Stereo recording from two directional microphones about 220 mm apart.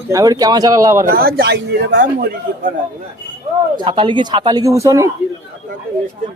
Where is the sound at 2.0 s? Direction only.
40° right (ahead or behind).